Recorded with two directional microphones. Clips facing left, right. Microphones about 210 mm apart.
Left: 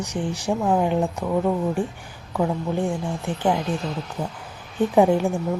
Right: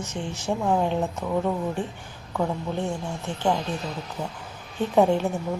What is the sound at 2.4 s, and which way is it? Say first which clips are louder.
Speech: left 4 dB; 15° left (ahead or behind).